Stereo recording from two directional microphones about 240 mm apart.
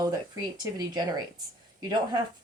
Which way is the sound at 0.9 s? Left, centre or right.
Centre.